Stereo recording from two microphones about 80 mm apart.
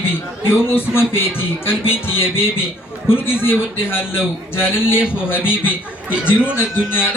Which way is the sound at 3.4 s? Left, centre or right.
Left.